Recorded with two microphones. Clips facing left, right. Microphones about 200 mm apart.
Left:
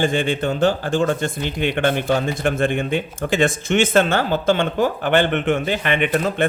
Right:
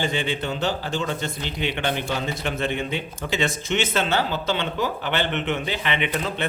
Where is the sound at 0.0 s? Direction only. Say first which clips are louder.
Left 6 dB; 50° left (ahead or behind).